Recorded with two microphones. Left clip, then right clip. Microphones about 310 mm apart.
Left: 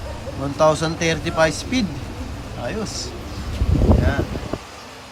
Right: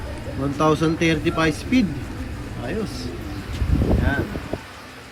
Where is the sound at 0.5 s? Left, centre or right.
Centre.